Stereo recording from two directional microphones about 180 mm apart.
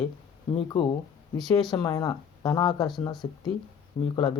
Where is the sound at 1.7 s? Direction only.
20° left (ahead or behind).